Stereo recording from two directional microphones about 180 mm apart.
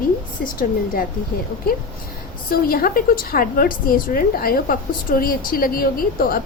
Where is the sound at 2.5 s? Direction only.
55° left (ahead or behind).